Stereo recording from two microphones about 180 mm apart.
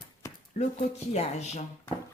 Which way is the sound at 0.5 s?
40° left (ahead or behind).